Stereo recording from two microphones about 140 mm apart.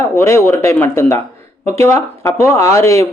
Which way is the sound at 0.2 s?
15° left (ahead or behind).